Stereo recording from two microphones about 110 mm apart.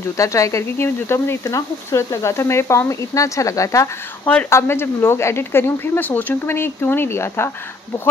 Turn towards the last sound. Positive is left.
turn(degrees=25)  # may be behind; listen again after turning